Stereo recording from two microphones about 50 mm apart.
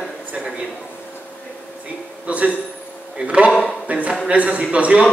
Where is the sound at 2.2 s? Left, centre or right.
Right.